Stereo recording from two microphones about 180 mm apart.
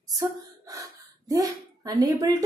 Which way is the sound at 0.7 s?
20° right (ahead or behind).